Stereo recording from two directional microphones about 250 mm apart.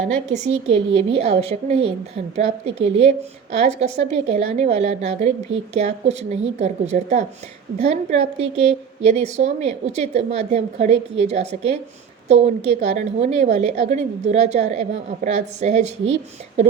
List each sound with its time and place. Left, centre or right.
0.0 s a woman's voice: right
12.8 s a woman's voice: right